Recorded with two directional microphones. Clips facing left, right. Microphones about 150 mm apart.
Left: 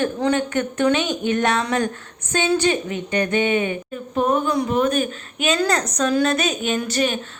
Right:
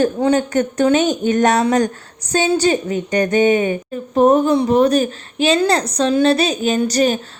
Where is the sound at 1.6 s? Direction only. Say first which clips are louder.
Right 6 dB; 40° right (ahead or behind).